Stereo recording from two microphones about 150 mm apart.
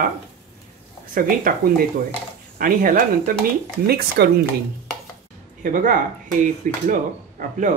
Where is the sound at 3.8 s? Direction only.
90° right.